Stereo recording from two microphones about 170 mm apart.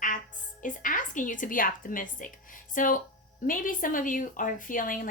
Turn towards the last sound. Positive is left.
turn(degrees=50)  # may be behind; listen again after turning